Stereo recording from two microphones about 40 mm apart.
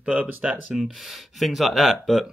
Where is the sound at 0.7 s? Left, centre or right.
Centre.